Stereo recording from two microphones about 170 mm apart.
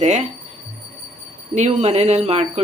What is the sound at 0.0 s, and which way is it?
Speech, 40° right (ahead or behind).